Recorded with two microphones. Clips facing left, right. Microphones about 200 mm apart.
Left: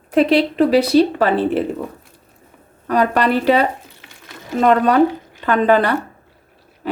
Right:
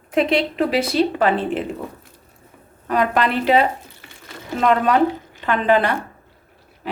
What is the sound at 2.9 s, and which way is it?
Speech, 35° left (ahead or behind).